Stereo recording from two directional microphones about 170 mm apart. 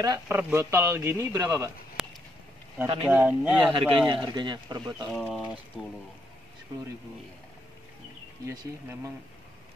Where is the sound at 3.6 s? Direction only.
30° right (ahead or behind).